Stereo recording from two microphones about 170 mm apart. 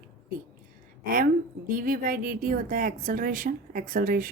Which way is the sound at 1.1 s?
55° right (ahead or behind).